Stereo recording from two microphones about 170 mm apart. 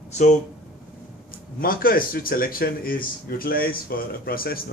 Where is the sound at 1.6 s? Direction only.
60° left (ahead or behind).